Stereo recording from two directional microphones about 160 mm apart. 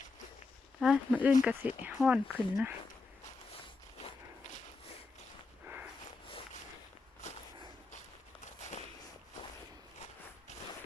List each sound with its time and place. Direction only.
0.8 s speech: 5° right (ahead or behind)
4.0 s walk: 50° left (ahead or behind)